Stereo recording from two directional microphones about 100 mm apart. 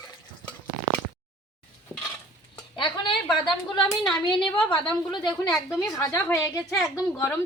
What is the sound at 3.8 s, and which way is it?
A woman's voice, 10° left (ahead or behind).